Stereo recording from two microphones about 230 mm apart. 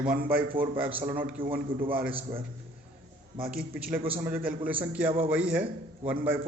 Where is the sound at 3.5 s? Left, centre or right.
Centre.